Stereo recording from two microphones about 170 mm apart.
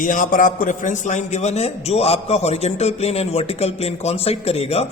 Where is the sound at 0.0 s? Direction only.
50° left (ahead or behind).